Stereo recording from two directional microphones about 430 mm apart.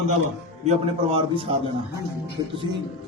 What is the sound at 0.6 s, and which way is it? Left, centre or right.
Speech, centre.